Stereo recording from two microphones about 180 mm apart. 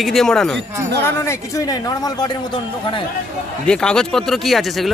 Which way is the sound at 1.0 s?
15° left (ahead or behind).